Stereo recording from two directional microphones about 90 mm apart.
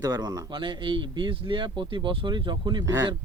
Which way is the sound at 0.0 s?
45° right (ahead or behind).